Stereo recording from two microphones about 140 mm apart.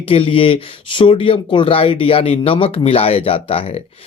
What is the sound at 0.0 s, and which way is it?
Speech, 40° left (ahead or behind).